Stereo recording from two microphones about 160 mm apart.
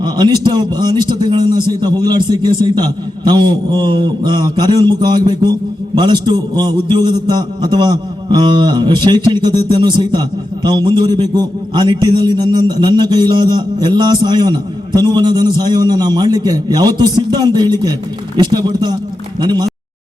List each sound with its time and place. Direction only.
0.0 s a man's voice: 30° right (ahead or behind)